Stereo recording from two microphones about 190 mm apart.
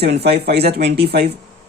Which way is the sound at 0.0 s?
60° right (ahead or behind).